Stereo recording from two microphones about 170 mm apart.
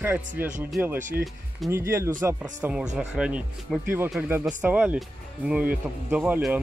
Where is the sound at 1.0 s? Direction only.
50° right (ahead or behind).